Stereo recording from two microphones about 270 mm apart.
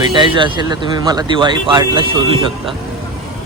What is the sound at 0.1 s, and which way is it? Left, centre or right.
Speech, centre.